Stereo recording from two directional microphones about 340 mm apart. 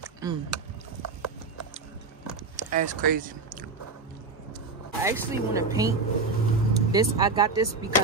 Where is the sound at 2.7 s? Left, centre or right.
Right.